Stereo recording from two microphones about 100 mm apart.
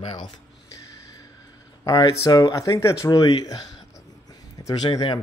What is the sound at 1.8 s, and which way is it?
Speech, 35° left (ahead or behind).